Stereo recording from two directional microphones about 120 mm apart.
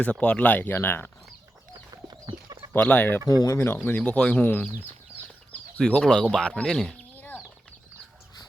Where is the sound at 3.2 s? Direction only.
30° left (ahead or behind).